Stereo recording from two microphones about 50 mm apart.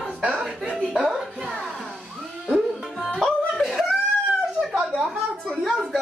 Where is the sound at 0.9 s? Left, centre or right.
Centre.